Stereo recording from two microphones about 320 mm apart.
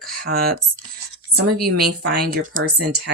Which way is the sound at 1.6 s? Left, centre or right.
Right.